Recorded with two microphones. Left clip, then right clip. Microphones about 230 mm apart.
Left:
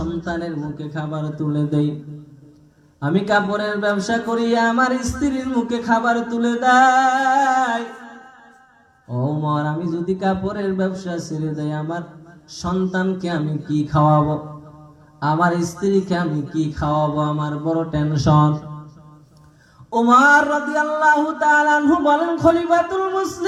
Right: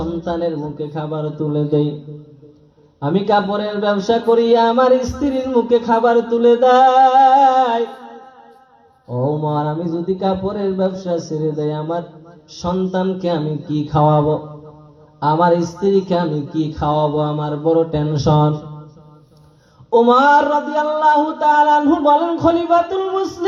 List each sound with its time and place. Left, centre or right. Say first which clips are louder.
0.2 s speech: right 5 dB; left
3.0 s speech: right 3 dB; left
9.9 s speech: right 1 dB; left
15.2 s speech: right 4 dB; left
19.9 s speech: right 2 dB; left